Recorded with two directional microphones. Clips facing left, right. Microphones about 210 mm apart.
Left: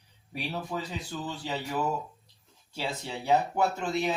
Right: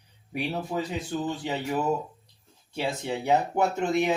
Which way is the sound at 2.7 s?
20° right (ahead or behind).